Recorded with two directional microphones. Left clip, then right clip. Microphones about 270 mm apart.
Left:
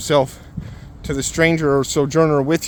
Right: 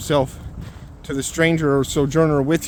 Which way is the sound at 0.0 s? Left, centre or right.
Left.